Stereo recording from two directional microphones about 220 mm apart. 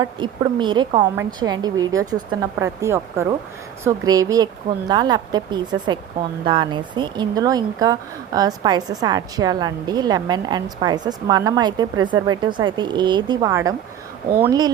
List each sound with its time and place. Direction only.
0.0 s a woman's voice: 20° right (ahead or behind)